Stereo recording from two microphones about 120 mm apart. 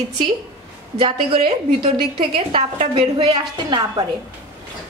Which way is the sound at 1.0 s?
50° right (ahead or behind).